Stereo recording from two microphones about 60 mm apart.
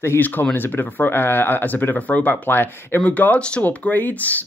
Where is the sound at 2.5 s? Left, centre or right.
Left.